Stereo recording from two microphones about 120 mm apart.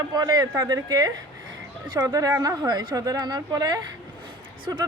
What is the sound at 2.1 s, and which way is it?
Speech, 30° right (ahead or behind).